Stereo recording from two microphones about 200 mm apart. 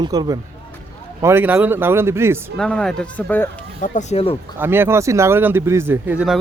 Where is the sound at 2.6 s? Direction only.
5° left (ahead or behind).